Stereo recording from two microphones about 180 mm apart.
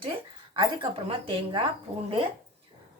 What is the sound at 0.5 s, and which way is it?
A woman's voice, 25° right (ahead or behind).